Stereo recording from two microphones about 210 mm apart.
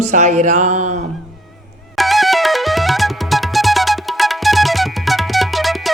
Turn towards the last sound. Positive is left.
turn(degrees=0)  # may be behind; listen again after turning